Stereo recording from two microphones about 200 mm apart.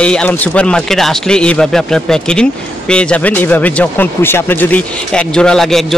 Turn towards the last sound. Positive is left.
turn(degrees=0)  # may be behind; listen again after turning